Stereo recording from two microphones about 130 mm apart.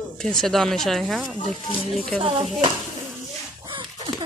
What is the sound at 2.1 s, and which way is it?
Speech, 50° right (ahead or behind).